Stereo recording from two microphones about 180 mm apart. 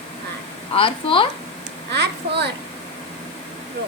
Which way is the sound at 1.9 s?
70° right (ahead or behind).